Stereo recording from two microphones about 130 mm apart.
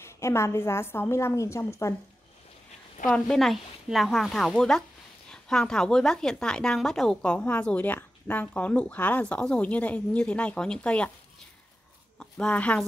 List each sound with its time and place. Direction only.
0.0 s a woman's voice: 20° left (ahead or behind)
3.1 s a woman's voice: 5° left (ahead or behind)
12.2 s speech: 10° left (ahead or behind)